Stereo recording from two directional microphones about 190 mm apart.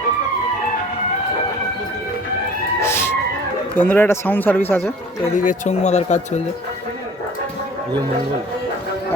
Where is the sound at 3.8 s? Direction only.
10° left (ahead or behind).